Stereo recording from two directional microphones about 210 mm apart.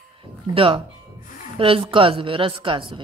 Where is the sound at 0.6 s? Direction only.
25° right (ahead or behind).